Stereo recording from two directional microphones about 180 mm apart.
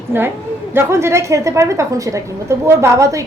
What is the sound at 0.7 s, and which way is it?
A woman's voice, 15° right (ahead or behind).